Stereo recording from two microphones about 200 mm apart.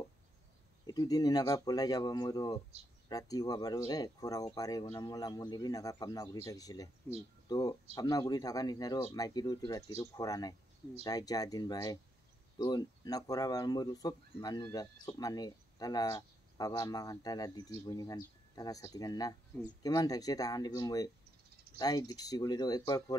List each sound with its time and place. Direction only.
0.8 s speech: 20° left (ahead or behind)